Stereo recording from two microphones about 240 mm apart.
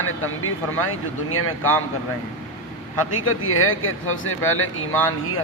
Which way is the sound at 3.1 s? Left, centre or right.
Left.